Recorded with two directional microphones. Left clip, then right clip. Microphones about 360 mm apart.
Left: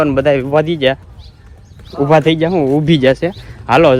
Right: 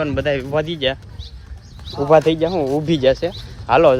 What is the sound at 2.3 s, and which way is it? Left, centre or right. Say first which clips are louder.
Speech: left 5 dB; left.